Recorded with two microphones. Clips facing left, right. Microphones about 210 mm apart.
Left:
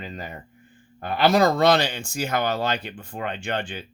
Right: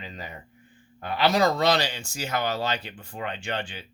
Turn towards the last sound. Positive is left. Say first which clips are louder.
# left 4 dB
turn(degrees=55)  # may be behind; listen again after turning